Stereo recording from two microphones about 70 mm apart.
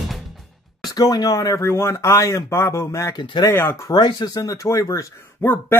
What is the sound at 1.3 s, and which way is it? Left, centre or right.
Speech, left.